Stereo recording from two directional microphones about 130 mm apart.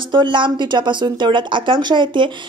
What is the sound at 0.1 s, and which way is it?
Speech, 35° right (ahead or behind).